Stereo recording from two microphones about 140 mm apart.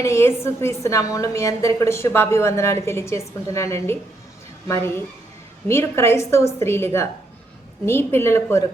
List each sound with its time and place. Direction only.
0.0 s a woman's voice: 20° left (ahead or behind)